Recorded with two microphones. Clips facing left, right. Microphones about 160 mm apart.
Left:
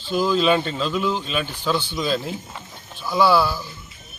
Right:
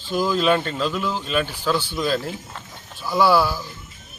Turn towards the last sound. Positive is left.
turn(degrees=-10)  # may be behind; listen again after turning